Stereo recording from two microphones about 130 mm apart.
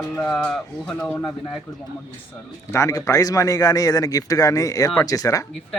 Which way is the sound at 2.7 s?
25° left (ahead or behind).